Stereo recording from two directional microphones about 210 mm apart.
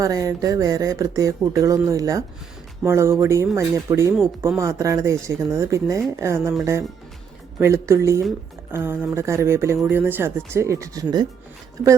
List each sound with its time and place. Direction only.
0.0 s speech: 15° right (ahead or behind)
7.6 s speech: 15° right (ahead or behind)